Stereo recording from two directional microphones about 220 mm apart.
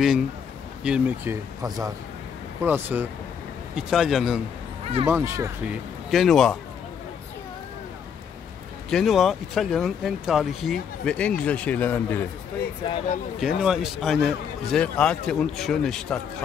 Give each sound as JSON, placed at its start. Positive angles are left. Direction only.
{"t": 0.8, "sound": "speech", "side_deg": -5}
{"t": 6.0, "sound": "speech", "side_deg": 0}
{"t": 8.9, "sound": "speech", "side_deg": 0}
{"t": 12.8, "sound": "speech", "side_deg": 20}
{"t": 13.4, "sound": "speech", "side_deg": -5}